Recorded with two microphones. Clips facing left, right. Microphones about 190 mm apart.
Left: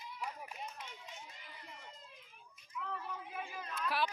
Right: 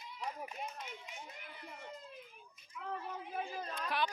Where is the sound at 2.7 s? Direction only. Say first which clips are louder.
Right 1 dB; 30° right (ahead or behind).